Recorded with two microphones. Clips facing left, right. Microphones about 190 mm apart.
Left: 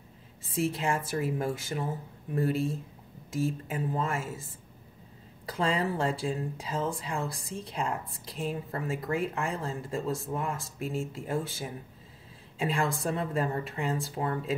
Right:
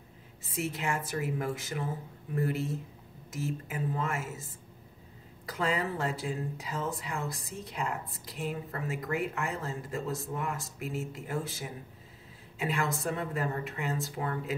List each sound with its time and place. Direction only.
0.5 s speech: 30° left (ahead or behind)
5.5 s speech: 30° left (ahead or behind)